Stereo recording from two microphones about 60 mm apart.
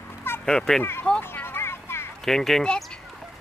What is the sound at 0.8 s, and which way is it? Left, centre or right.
Speech, left.